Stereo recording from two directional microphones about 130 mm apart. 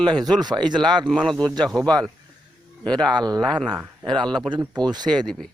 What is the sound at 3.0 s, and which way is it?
Speech, 30° right (ahead or behind).